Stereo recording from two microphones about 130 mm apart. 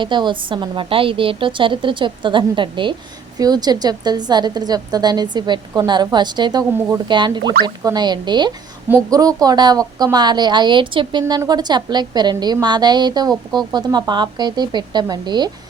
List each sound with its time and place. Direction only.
0.0 s speech: 35° right (ahead or behind)
6.7 s speech: 20° right (ahead or behind)
7.1 s speech: 35° right (ahead or behind)